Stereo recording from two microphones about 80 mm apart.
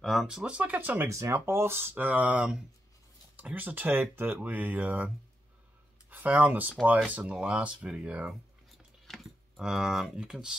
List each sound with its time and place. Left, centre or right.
0.0 s speech: centre; by 1.0 s right
1.0 s speech: right; by 8.4 s centre
8.7 s a sound: centre